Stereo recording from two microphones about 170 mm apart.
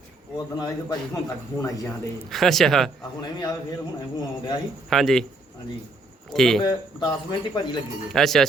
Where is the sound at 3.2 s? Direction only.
25° left (ahead or behind).